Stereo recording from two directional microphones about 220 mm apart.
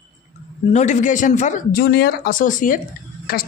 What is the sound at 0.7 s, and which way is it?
A man's voice, 35° left (ahead or behind).